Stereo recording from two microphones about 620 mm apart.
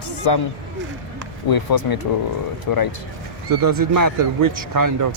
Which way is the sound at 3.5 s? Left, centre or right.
Right.